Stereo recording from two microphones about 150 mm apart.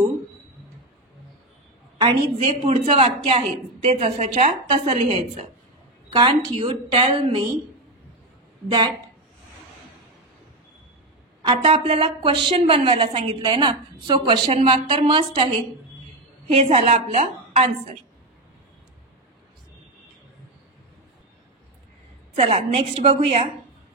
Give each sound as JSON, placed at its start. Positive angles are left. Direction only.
{"t": 2.0, "sound": "a woman's voice", "side_deg": -30}
{"t": 2.3, "sound": "a woman's voice", "side_deg": -45}
{"t": 11.4, "sound": "a woman's voice", "side_deg": -35}
{"t": 16.5, "sound": "a woman's voice", "side_deg": -45}
{"t": 22.5, "sound": "a woman's voice", "side_deg": -40}